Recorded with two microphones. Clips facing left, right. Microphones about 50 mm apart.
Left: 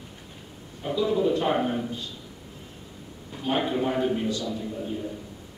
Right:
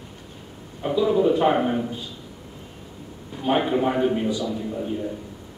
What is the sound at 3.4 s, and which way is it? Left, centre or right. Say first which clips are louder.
A man's voice: right 4 dB; centre.